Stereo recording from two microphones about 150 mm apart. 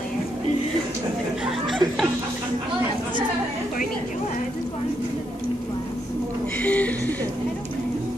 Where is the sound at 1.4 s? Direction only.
Centre (ahead or behind).